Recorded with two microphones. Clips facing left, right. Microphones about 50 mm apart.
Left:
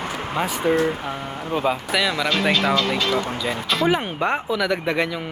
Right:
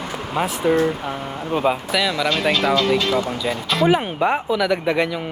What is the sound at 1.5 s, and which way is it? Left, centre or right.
Speech, centre.